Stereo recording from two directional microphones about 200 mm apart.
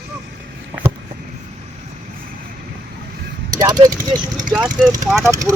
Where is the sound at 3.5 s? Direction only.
15° right (ahead or behind).